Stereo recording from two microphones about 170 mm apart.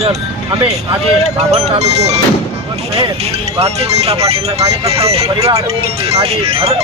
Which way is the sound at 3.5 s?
35° right (ahead or behind).